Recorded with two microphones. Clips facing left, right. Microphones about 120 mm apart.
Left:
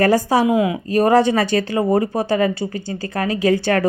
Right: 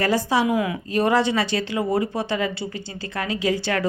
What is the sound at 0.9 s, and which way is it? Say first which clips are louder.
Speech: left 5 dB; 40° left (ahead or behind).